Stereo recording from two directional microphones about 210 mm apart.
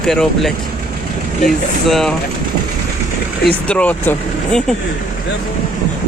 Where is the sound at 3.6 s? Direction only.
5° left (ahead or behind).